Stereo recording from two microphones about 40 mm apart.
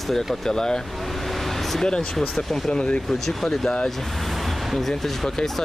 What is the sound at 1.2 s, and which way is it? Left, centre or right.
Vehicle, centre.